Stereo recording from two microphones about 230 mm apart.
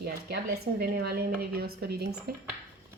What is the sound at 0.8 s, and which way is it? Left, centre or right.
A woman's voice, right.